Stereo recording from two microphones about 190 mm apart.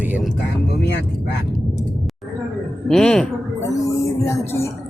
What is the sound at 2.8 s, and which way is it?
Speech, 5° left (ahead or behind).